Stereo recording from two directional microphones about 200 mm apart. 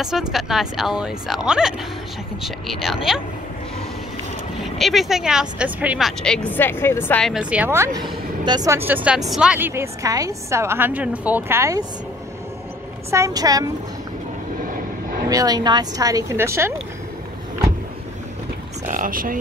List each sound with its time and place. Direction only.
0.0 s a woman's voice: 5° right (ahead or behind)
4.7 s a woman's voice: centre (ahead or behind)
13.1 s a woman's voice: 15° right (ahead or behind)
15.2 s a woman's voice: 20° right (ahead or behind)
18.9 s speech: 45° right (ahead or behind)